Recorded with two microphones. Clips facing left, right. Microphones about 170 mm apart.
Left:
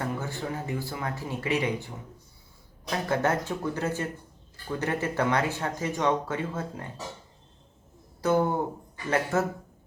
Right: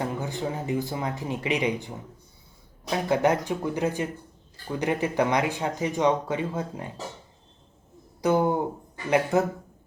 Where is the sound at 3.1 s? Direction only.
15° right (ahead or behind).